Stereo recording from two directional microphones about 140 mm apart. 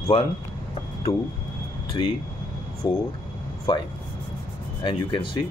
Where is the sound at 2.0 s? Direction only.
35° left (ahead or behind).